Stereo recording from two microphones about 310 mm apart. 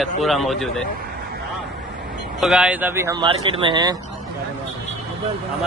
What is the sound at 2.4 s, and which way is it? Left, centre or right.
Speech, centre.